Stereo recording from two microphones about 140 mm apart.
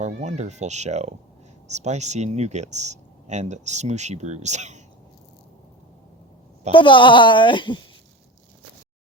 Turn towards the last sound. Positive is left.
turn(degrees=35)  # may be behind; listen again after turning